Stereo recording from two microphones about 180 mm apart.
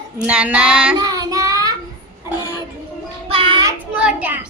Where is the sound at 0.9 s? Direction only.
20° right (ahead or behind).